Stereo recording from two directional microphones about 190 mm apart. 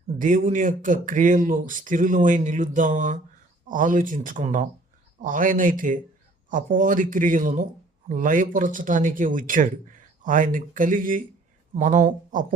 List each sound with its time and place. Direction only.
0.2 s speech: 40° right (ahead or behind)